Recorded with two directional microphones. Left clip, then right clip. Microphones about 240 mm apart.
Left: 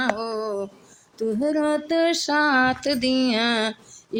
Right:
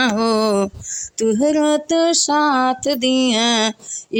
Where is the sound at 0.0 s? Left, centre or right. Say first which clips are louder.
Right 8 dB; right.